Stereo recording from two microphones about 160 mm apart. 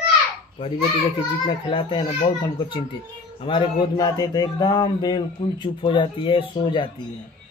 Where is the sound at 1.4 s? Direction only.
35° left (ahead or behind).